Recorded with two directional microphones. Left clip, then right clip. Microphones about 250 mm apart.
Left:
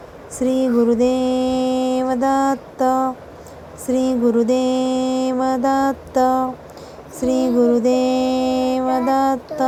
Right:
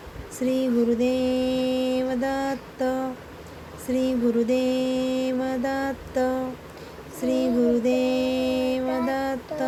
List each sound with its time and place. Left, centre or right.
0.3 s mantra: centre
2.7 s a sound: centre
3.8 s mantra: centre